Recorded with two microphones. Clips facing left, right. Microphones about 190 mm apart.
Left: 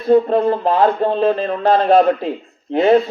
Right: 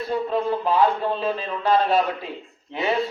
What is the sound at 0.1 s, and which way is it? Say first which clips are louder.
A man's voice: left 11 dB; 50° left (ahead or behind).